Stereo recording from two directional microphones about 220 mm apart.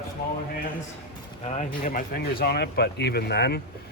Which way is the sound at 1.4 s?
30° left (ahead or behind).